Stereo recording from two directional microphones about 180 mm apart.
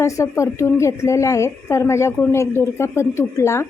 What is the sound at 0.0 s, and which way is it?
A woman's voice, 15° left (ahead or behind).